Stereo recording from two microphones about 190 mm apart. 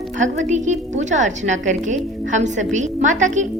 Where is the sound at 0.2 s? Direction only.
40° right (ahead or behind).